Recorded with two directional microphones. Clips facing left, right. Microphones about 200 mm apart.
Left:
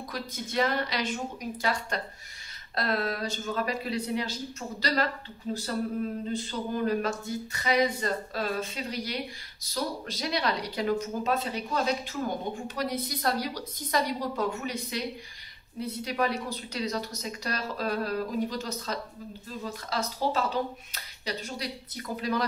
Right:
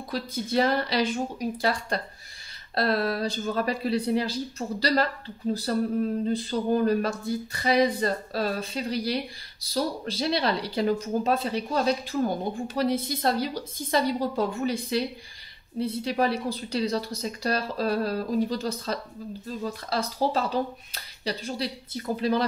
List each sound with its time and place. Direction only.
0.1 s speech: 30° right (ahead or behind)
6.2 s a woman's voice: 40° right (ahead or behind)